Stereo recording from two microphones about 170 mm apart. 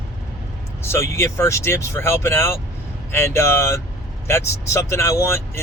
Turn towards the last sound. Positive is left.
turn(degrees=15)  # may be behind; listen again after turning